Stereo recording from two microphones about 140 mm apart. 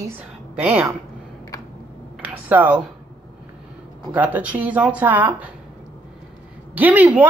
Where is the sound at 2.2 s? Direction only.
10° right (ahead or behind).